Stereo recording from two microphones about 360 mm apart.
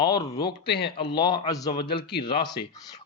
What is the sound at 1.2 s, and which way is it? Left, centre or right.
Speech, centre.